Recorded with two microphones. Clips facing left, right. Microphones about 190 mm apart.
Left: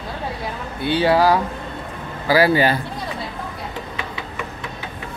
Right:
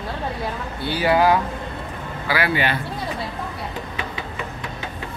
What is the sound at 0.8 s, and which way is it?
A man's voice, 25° left (ahead or behind).